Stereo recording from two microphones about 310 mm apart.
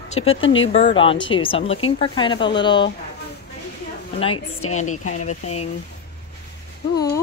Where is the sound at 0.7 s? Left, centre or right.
Centre.